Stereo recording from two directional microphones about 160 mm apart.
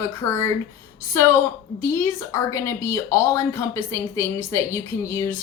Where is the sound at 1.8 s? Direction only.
15° left (ahead or behind).